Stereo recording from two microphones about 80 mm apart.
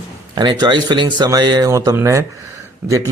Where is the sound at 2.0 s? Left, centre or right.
Right.